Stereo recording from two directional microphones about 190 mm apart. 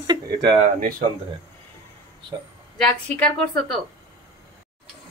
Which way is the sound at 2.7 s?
Centre (ahead or behind).